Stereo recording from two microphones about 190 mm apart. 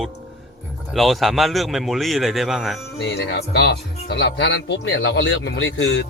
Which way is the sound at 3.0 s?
65° left (ahead or behind).